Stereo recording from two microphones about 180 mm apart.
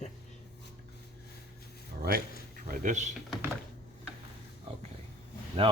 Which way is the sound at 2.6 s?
45° right (ahead or behind).